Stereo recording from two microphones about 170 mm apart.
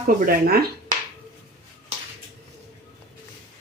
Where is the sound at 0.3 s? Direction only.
60° right (ahead or behind).